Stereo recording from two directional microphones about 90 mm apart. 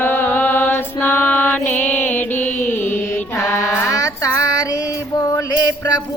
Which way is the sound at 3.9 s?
40° left (ahead or behind).